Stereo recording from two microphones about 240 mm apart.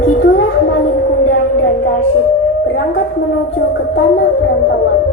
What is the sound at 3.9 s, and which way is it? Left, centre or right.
Music, left.